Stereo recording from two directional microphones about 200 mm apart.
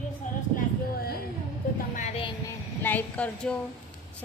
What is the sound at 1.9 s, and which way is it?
Music, 35° left (ahead or behind).